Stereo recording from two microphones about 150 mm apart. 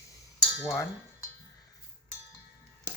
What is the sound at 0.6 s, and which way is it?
Speech, 15° left (ahead or behind).